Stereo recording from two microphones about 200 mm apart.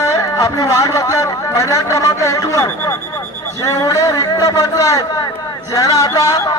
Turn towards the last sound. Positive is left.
turn(degrees=15)  # may be behind; listen again after turning